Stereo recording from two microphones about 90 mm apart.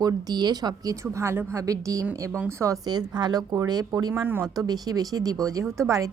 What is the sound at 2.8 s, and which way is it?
Speech, 50° right (ahead or behind).